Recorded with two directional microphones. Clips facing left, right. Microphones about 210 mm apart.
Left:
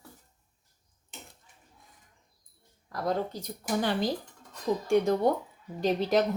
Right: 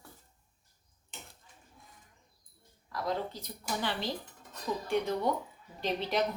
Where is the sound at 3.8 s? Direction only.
45° left (ahead or behind).